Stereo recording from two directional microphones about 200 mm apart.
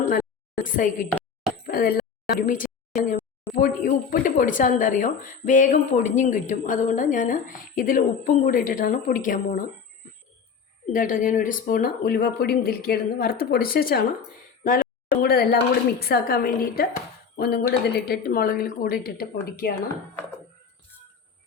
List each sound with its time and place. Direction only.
0.6 s a woman's voice: 40° left (ahead or behind)
10.8 s speech: 40° left (ahead or behind)
15.2 s speech: 50° left (ahead or behind)